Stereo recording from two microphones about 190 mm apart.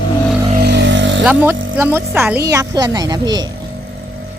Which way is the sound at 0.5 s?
60° right (ahead or behind).